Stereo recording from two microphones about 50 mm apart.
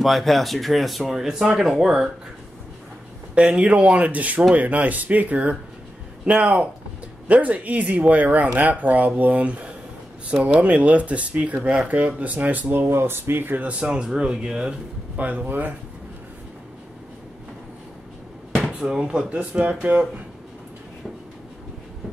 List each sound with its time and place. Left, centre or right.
0.0 s speech: centre
3.3 s speech: right
12.7 s speech: right
13.7 s speech: centre
15.1 s speech: right
18.9 s speech: centre